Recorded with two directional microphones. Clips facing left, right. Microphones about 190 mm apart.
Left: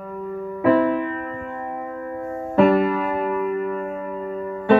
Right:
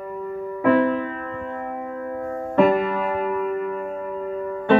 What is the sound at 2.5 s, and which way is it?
Music, centre (ahead or behind).